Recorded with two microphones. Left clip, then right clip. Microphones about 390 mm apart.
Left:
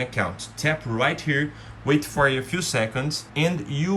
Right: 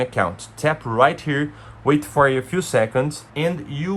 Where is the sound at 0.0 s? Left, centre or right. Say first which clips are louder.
Right 5 dB; centre.